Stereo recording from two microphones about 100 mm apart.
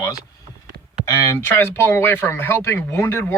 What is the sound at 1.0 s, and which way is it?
Speech, 25° left (ahead or behind).